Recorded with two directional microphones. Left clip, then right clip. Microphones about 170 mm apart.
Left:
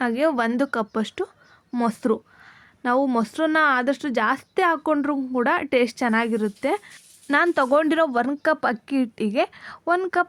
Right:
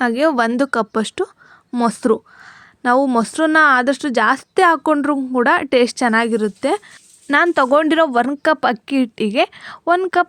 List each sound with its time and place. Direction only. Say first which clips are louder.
0.0 s speech: right 6 dB; 35° right (ahead or behind)